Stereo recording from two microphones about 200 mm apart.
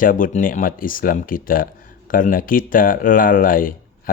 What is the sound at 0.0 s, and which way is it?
Speech, 40° left (ahead or behind).